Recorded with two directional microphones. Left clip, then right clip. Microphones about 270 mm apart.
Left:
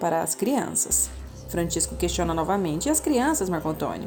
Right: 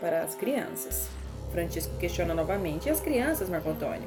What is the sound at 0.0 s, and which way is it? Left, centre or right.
A woman's voice, left.